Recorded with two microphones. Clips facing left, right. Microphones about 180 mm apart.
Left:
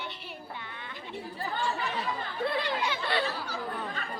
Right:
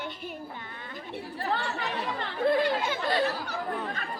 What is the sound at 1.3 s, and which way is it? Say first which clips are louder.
Chatter: right 1 dB; 75° right (ahead or behind).